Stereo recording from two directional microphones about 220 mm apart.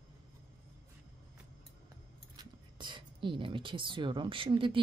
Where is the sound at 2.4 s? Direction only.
20° right (ahead or behind).